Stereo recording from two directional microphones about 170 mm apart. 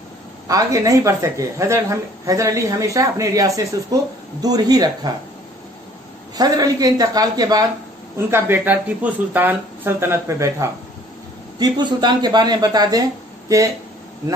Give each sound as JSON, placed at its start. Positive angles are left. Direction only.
{"t": 0.5, "sound": "speech", "side_deg": -20}
{"t": 6.3, "sound": "speech", "side_deg": -20}
{"t": 8.3, "sound": "speech", "side_deg": -10}